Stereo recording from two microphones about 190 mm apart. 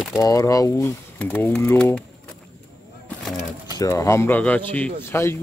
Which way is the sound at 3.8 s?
15° left (ahead or behind).